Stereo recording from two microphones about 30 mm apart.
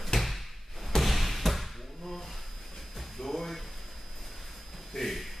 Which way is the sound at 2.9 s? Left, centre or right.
Centre.